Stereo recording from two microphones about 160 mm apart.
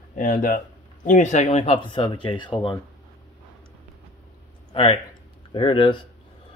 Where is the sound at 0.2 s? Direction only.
60° left (ahead or behind); by 2.5 s 30° left (ahead or behind).